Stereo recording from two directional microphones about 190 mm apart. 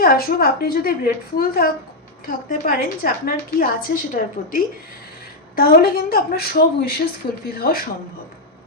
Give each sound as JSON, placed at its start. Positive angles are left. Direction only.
{"t": 0.0, "sound": "a woman's voice", "side_deg": 50}